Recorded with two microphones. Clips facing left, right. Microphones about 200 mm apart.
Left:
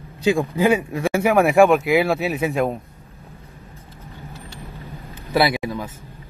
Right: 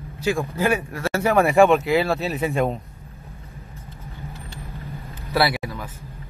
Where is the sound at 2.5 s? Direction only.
Centre (ahead or behind).